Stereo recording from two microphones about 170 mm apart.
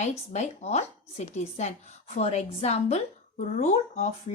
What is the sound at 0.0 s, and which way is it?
Speech, 45° left (ahead or behind).